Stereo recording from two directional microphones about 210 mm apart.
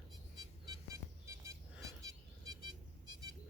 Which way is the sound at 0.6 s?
20° right (ahead or behind).